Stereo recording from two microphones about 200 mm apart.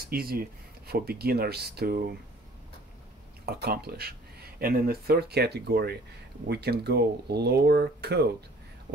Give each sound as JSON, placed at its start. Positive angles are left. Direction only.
{"t": 0.0, "sound": "speech", "side_deg": -50}
{"t": 3.4, "sound": "speech", "side_deg": -50}